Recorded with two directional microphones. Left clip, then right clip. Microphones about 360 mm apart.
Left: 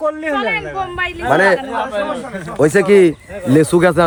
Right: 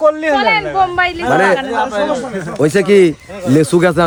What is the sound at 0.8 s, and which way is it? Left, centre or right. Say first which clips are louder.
Speech: right 7 dB; right.